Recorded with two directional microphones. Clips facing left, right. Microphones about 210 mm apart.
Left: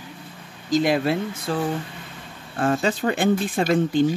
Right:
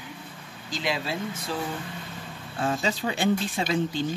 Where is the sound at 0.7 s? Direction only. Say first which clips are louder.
Left 10 dB; 55° left (ahead or behind).